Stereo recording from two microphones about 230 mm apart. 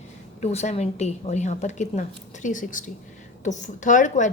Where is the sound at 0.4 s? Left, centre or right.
Left.